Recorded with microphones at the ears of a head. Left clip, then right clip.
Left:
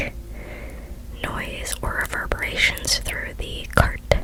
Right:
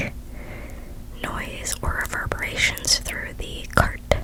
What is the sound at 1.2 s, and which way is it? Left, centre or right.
Whispering, centre.